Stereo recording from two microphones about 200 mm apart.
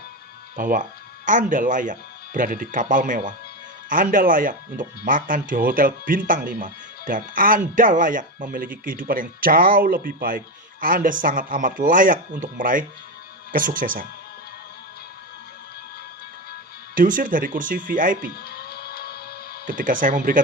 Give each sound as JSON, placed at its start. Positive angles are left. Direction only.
{"t": 0.5, "sound": "speech", "side_deg": -40}
{"t": 16.9, "sound": "speech", "side_deg": -45}
{"t": 18.4, "sound": "music", "side_deg": 50}
{"t": 19.6, "sound": "speech", "side_deg": -40}